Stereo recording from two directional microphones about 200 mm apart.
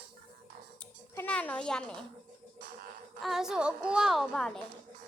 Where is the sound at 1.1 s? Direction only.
10° left (ahead or behind).